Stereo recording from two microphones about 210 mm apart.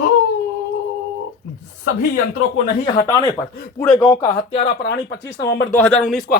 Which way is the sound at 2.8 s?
20° left (ahead or behind).